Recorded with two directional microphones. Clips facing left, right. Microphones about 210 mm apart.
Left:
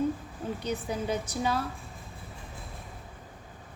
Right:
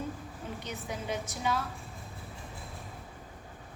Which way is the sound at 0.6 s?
35° left (ahead or behind).